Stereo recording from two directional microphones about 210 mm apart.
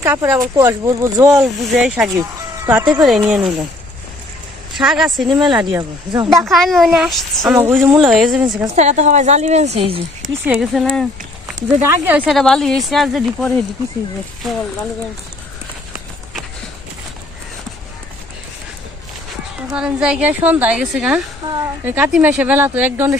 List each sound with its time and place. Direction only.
0.0 s speech: 10° right (ahead or behind)
1.4 s a woman's voice: centre (ahead or behind)
2.1 s speech: 15° right (ahead or behind)
3.0 s a woman's voice: centre (ahead or behind)
4.7 s a woman's voice: centre (ahead or behind)
5.3 s speech: 20° right (ahead or behind)
6.4 s a woman's voice: centre (ahead or behind)
8.7 s speech: 35° right (ahead or behind)
10.4 s a woman's voice: 5° right (ahead or behind)
11.8 s speech: 10° right (ahead or behind)
12.3 s a woman's voice: centre (ahead or behind)
19.7 s a woman's voice: 5° right (ahead or behind)